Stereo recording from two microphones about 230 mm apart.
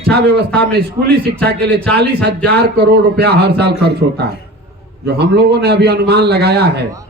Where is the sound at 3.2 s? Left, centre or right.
Right.